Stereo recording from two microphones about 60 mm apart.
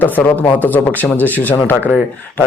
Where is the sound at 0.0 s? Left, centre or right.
Left.